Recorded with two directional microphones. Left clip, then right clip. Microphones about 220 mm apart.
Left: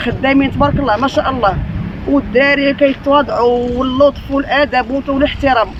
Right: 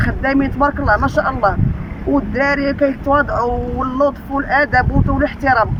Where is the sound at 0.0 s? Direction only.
15° left (ahead or behind).